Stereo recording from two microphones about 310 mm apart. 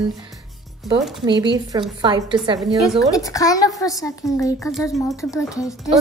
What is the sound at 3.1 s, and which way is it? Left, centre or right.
A woman's voice, centre.